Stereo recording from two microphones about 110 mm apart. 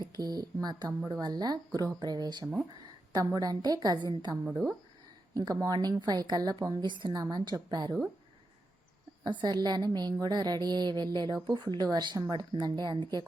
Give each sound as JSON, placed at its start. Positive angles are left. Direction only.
{"t": 0.0, "sound": "a woman's voice", "side_deg": -35}
{"t": 9.2, "sound": "a woman's voice", "side_deg": -40}